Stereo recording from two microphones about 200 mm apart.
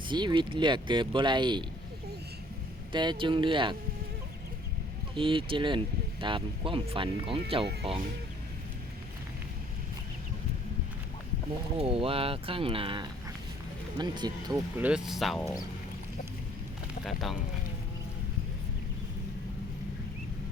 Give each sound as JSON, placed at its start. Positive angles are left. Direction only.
{"t": 0.1, "sound": "speech", "side_deg": -25}
{"t": 2.9, "sound": "speech", "side_deg": -25}
{"t": 5.1, "sound": "speech", "side_deg": -25}
{"t": 11.8, "sound": "speech", "side_deg": -30}
{"t": 14.8, "sound": "speech", "side_deg": -5}
{"t": 17.0, "sound": "speech", "side_deg": 0}